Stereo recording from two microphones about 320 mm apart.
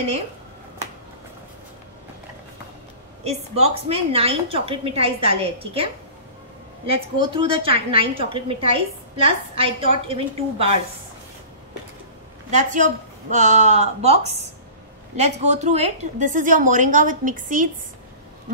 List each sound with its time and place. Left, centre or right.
3.3 s a woman's voice: centre
6.9 s a woman's voice: centre
12.4 s a woman's voice: right